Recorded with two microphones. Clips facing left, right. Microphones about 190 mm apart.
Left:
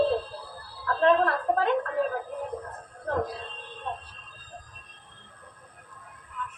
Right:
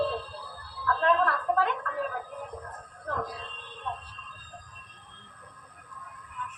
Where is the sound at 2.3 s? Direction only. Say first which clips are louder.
Left 6 dB; 25° left (ahead or behind).